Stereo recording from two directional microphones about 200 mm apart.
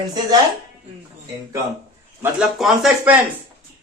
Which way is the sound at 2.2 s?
Centre (ahead or behind).